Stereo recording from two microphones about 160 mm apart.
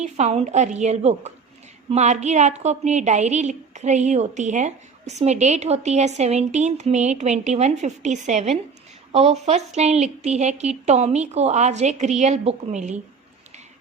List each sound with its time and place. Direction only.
0.0 s a woman's voice: 40° right (ahead or behind)